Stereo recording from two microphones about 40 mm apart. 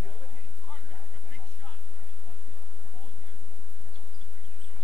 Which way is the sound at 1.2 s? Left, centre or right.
Left.